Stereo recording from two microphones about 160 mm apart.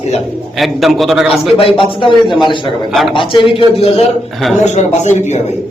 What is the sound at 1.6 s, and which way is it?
A man's voice, 35° left (ahead or behind).